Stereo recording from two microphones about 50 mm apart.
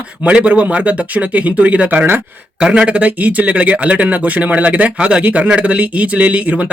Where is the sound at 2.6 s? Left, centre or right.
Right.